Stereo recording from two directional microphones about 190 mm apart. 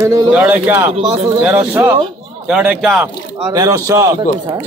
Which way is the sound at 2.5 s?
Centre (ahead or behind).